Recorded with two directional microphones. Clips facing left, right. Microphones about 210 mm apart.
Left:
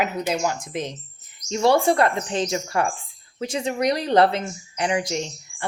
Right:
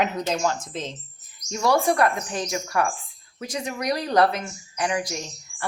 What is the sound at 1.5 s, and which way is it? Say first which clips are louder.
Speech: left 3 dB; 25° left (ahead or behind).